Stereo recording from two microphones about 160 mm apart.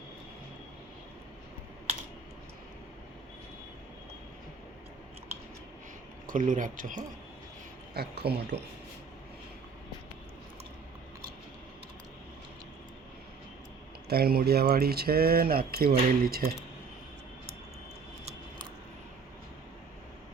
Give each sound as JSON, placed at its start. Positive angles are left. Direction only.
{"t": 6.2, "sound": "speech", "side_deg": -55}
{"t": 7.9, "sound": "speech", "side_deg": -85}
{"t": 14.1, "sound": "speech", "side_deg": -75}